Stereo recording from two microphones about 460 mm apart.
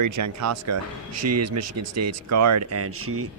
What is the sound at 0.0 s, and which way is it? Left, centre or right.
Speech, right.